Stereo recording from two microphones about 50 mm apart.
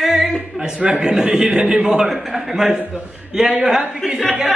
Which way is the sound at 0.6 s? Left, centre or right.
Right.